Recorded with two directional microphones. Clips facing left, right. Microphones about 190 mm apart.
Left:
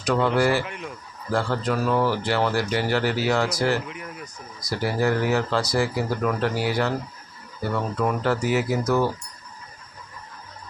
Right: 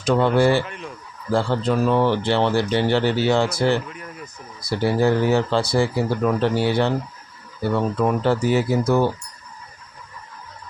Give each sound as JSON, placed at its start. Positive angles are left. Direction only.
{"t": 0.0, "sound": "speech", "side_deg": -25}
{"t": 0.6, "sound": "fowl", "side_deg": 10}
{"t": 1.3, "sound": "speech", "side_deg": -25}
{"t": 3.8, "sound": "fowl", "side_deg": 15}
{"t": 4.6, "sound": "speech", "side_deg": -25}
{"t": 8.0, "sound": "speech", "side_deg": -25}